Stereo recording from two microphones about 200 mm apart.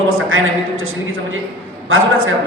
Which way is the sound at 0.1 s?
85° right.